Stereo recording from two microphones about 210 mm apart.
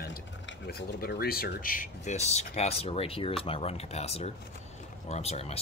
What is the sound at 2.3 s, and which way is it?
Speech, 30° left (ahead or behind).